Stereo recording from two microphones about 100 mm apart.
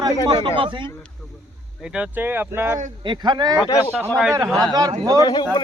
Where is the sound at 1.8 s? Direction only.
10° right (ahead or behind).